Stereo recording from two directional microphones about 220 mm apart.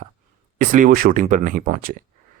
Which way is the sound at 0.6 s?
35° right (ahead or behind).